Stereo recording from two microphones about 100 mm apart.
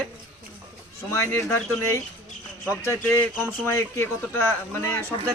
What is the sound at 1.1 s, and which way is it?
Speech, 25° left (ahead or behind).